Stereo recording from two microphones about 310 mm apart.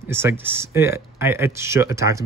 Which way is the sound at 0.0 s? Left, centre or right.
Centre.